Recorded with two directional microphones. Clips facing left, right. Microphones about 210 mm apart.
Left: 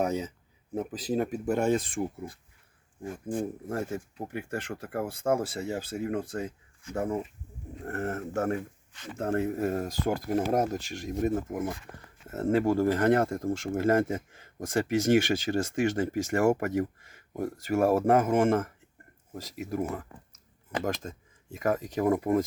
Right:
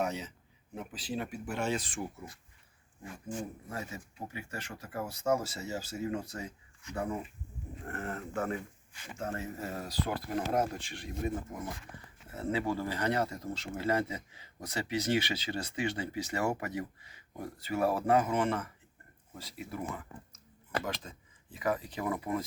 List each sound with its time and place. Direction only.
0.0 s speech: 45° left (ahead or behind)
3.0 s speech: 50° left (ahead or behind)
8.9 s speech: 10° right (ahead or behind)
9.1 s speech: 55° left (ahead or behind)